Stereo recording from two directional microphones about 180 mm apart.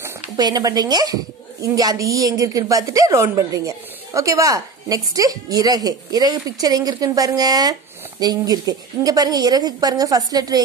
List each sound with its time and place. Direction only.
0.0 s speech: 20° right (ahead or behind)